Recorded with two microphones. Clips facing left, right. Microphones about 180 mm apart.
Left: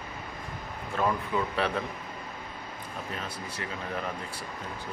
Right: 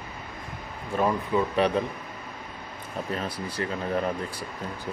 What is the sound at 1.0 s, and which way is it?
Speech, 20° right (ahead or behind).